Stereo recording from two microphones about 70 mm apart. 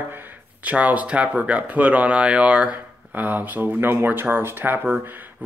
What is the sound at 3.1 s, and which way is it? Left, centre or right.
Speech, right.